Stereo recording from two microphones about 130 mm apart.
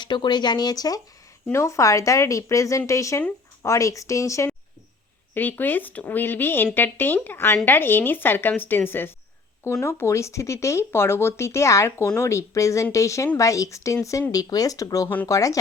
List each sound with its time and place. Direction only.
0.0 s speech: 35° left (ahead or behind)